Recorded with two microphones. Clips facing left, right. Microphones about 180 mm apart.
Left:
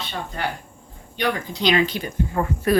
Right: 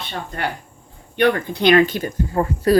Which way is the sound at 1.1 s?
60° right (ahead or behind).